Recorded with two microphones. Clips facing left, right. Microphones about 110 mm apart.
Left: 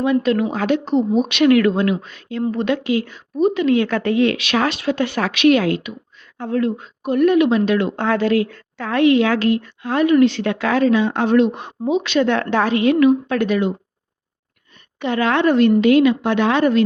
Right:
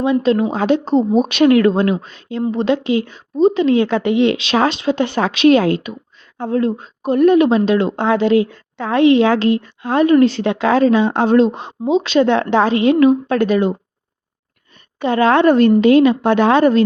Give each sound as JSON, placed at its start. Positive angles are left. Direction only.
{"t": 0.0, "sound": "speech", "side_deg": -25}
{"t": 10.4, "sound": "speech", "side_deg": -25}
{"t": 14.9, "sound": "a woman's voice", "side_deg": -35}